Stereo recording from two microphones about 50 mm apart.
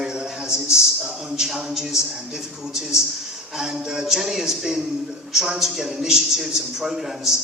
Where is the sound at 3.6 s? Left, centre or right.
Centre.